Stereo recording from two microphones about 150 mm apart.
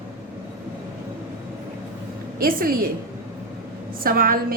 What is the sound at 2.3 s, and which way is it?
Speech, 75° right (ahead or behind).